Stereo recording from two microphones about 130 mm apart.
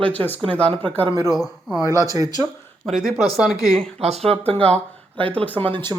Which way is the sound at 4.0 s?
55° right (ahead or behind).